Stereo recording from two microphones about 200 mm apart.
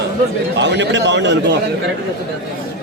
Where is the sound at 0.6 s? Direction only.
60° right (ahead or behind).